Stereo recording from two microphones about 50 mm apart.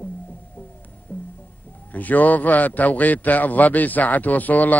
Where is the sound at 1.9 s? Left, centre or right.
Left.